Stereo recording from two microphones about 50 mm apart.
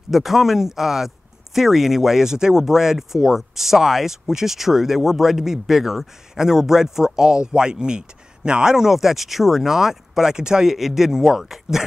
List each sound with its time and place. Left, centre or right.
0.1 s speech: centre